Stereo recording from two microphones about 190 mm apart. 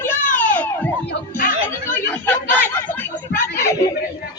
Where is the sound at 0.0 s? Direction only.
10° left (ahead or behind).